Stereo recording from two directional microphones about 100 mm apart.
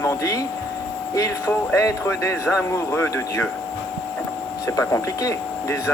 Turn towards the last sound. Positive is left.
turn(degrees=30)  # may be behind; listen again after turning